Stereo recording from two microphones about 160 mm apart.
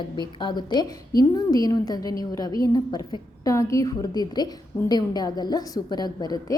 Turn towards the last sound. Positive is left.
turn(degrees=25)  # may be behind; listen again after turning